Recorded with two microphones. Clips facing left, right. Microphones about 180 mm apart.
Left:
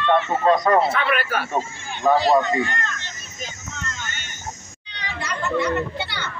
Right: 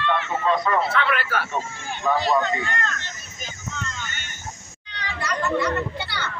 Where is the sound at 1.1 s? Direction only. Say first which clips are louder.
Left 2 dB; 15° left (ahead or behind).